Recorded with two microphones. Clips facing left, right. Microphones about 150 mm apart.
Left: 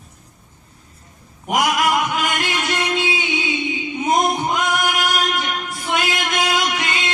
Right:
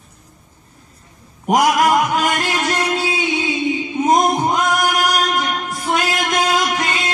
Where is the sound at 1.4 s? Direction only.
40° right (ahead or behind).